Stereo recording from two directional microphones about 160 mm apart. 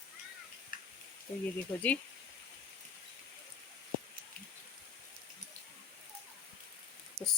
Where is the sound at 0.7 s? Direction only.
60° left (ahead or behind).